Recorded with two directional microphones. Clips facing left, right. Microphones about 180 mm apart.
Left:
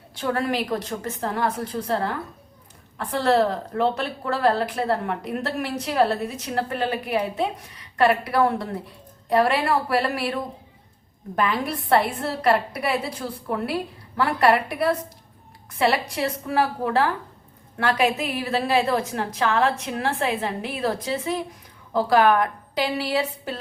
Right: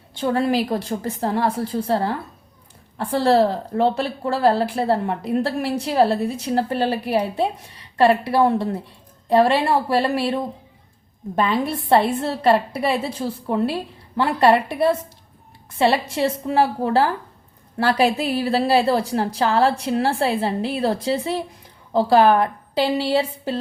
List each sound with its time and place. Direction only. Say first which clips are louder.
0.1 s a woman's voice: right 5 dB; 25° right (ahead or behind)